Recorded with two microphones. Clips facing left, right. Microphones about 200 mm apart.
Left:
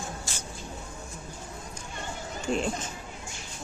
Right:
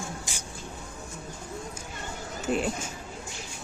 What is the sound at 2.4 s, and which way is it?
Speech, 5° right (ahead or behind).